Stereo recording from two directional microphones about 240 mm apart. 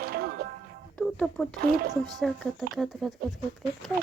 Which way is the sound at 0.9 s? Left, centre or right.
Centre.